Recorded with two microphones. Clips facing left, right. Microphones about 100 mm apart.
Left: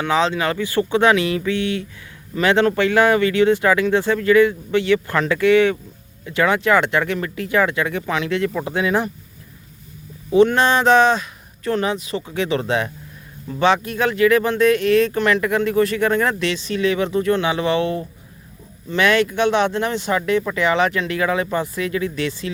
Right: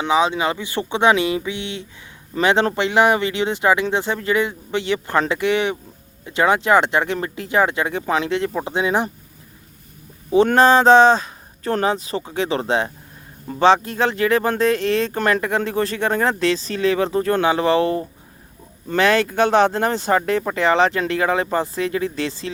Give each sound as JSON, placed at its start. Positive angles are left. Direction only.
{"t": 0.0, "sound": "speech", "side_deg": -15}
{"t": 10.3, "sound": "speech", "side_deg": -35}